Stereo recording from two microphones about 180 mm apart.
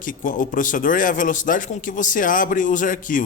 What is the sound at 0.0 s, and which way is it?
Speech, 50° left (ahead or behind).